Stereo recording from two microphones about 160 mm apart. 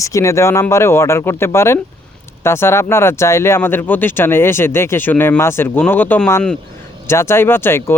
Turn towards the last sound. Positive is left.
turn(degrees=15)  # may be behind; listen again after turning